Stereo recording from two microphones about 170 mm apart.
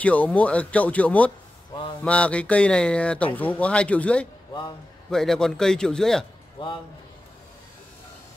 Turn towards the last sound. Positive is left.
turn(degrees=30)  # may be behind; listen again after turning